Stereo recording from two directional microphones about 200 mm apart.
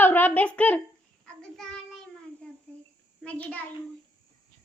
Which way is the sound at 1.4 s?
5° left (ahead or behind).